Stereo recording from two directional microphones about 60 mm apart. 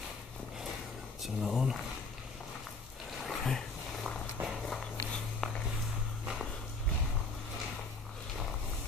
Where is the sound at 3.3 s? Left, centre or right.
Centre.